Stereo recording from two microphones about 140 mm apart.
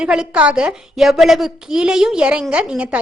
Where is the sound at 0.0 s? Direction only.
5° right (ahead or behind).